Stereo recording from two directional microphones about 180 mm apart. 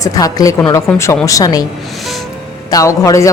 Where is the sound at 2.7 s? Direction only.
20° left (ahead or behind).